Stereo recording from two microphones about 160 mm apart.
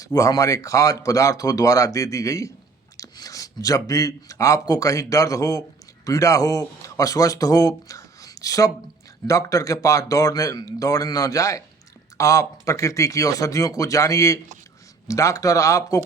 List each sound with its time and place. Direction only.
0.0 s speech: 20° left (ahead or behind)